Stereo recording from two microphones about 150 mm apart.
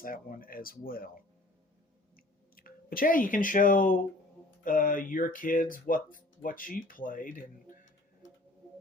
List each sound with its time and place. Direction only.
0.0 s speech: 70° left (ahead or behind)
2.1 s a sound: 75° left (ahead or behind)
4.6 s speech: 65° left (ahead or behind)